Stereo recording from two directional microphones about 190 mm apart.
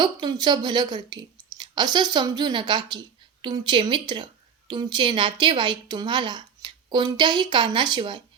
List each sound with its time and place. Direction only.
0.0 s a woman's voice: 20° right (ahead or behind)